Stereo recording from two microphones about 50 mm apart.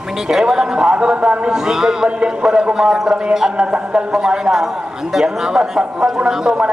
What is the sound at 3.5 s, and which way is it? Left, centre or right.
A man's voice, centre.